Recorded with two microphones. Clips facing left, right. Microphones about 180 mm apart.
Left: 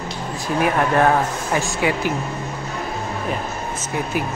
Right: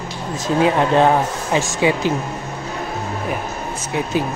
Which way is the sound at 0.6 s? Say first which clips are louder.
Right 3 dB; 20° right (ahead or behind).